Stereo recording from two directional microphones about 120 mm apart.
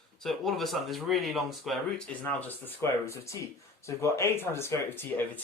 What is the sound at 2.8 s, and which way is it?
Speech, 20° left (ahead or behind).